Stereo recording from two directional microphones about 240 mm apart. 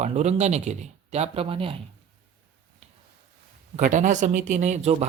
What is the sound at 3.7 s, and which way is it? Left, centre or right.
Speech, right.